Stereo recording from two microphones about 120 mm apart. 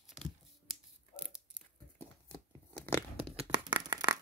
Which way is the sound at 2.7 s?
20° left (ahead or behind).